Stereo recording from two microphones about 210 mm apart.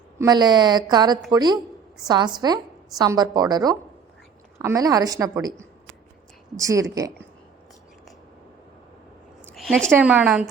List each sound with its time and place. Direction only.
0.2 s a woman's voice: 20° right (ahead or behind)
9.4 s a sound: 5° left (ahead or behind)
9.9 s a woman's voice: 5° right (ahead or behind)